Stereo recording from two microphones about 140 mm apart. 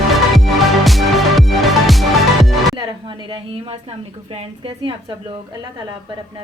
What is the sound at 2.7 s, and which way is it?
A woman's voice, 30° right (ahead or behind).